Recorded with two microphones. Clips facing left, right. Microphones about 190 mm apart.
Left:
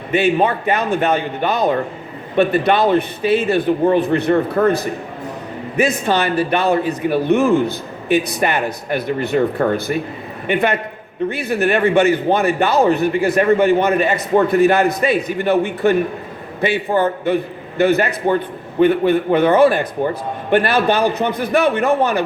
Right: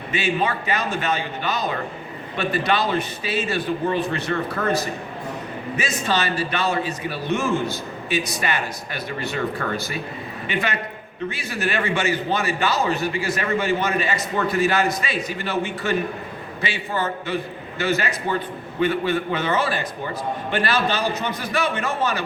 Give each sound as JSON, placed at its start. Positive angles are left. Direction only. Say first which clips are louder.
{"t": 0.1, "sound": "a man's voice", "louder": "left 8 dB", "side_deg": 60}
{"t": 4.6, "sound": "a man's voice", "louder": "left 9 dB", "side_deg": 35}
{"t": 5.7, "sound": "a man's voice", "louder": "left 8 dB", "side_deg": 60}